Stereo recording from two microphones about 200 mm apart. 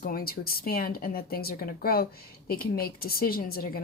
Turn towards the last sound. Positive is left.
turn(degrees=50)  # may be behind; listen again after turning